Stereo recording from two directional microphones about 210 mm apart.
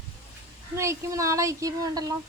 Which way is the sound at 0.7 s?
15° right (ahead or behind).